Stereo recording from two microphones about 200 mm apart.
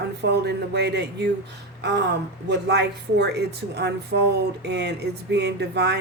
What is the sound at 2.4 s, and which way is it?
A woman's voice, 55° right (ahead or behind).